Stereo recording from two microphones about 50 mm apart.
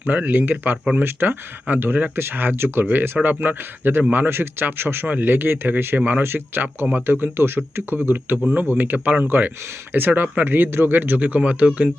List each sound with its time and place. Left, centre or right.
0.0 s speech: right
0.9 s speech: right
2.8 s speech: right
5.0 s speech: right